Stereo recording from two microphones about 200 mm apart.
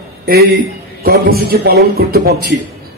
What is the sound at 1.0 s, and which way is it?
A man's voice, 50° right (ahead or behind).